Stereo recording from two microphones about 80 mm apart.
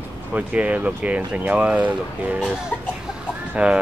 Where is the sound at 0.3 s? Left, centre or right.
Centre.